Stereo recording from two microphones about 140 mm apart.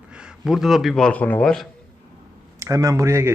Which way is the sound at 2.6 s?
25° right (ahead or behind).